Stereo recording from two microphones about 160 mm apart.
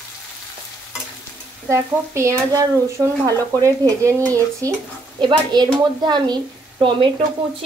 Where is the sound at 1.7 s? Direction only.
20° right (ahead or behind).